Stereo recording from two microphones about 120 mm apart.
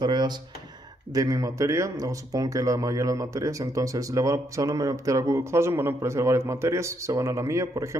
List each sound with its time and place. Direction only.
0.0 s speech: 35° right (ahead or behind)